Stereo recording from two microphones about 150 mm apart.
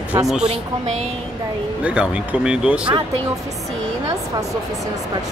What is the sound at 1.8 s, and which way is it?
Speech, 5° right (ahead or behind).